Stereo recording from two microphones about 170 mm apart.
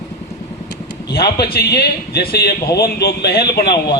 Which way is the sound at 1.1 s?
65° left (ahead or behind).